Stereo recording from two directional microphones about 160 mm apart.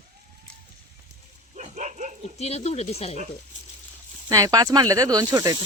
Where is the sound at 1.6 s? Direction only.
50° right (ahead or behind).